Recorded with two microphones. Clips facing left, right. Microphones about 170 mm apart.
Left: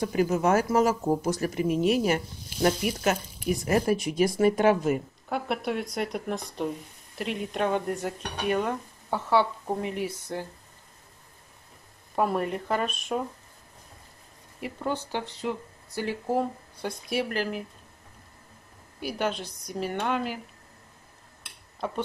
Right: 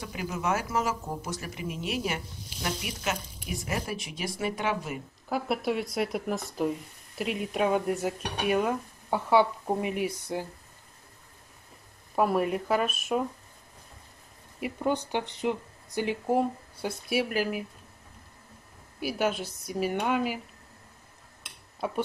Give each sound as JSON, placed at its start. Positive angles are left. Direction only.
{"t": 0.0, "sound": "speech", "side_deg": 45}
{"t": 5.3, "sound": "speech", "side_deg": 0}
{"t": 7.2, "sound": "dishes", "side_deg": -5}
{"t": 12.2, "sound": "dishes", "side_deg": -5}
{"t": 14.6, "sound": "dishes", "side_deg": -15}
{"t": 18.9, "sound": "dishes", "side_deg": -5}
{"t": 21.7, "sound": "speech", "side_deg": -10}